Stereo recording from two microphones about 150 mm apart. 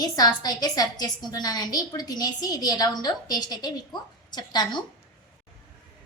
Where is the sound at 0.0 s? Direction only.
25° left (ahead or behind).